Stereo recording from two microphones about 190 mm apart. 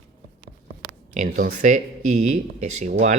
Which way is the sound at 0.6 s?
40° right (ahead or behind).